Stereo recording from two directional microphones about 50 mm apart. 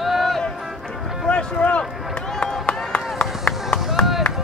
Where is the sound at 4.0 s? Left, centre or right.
Centre.